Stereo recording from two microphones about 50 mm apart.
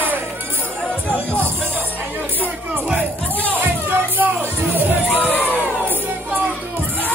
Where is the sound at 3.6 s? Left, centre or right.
Right.